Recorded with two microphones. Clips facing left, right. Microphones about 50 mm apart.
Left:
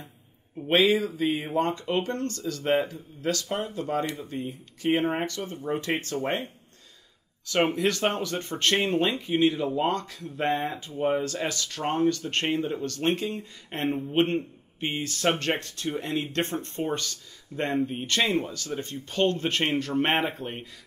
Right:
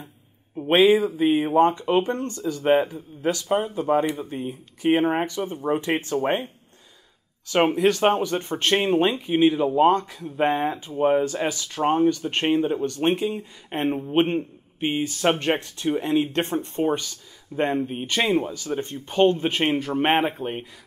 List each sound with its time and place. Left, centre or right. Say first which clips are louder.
0.6 s a man's voice: right 5 dB; right
0.9 s speech: right 6 dB; centre
2.7 s speech: right 5 dB; centre
3.2 s speech: right 6 dB; centre
7.7 s speech: right 6 dB; centre